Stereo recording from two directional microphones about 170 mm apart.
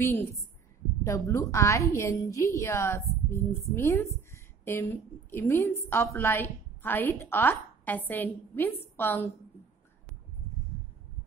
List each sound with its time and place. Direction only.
0.0 s a woman's voice: 15° left (ahead or behind)